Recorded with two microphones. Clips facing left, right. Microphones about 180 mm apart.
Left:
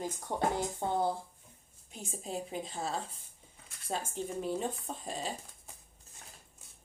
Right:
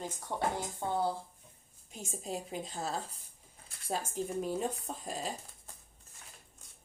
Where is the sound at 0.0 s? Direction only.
15° left (ahead or behind).